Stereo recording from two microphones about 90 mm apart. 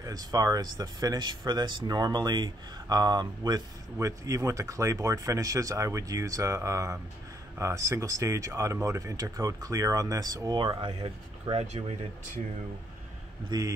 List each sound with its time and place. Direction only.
0.0 s speech: 45° right (ahead or behind)
4.0 s speech: 35° right (ahead or behind)
13.5 s speech: 40° right (ahead or behind)